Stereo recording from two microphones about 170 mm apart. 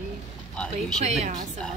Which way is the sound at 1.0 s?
40° right (ahead or behind).